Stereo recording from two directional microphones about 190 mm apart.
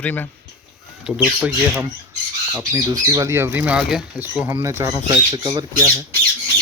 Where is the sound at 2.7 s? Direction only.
20° right (ahead or behind).